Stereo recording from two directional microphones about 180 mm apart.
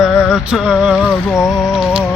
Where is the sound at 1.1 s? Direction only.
10° left (ahead or behind).